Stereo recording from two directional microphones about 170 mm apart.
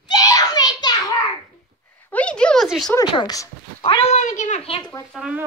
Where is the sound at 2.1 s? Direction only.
5° left (ahead or behind).